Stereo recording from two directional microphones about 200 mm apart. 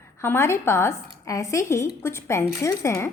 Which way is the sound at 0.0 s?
10° left (ahead or behind).